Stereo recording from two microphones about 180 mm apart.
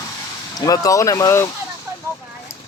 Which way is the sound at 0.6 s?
20° left (ahead or behind).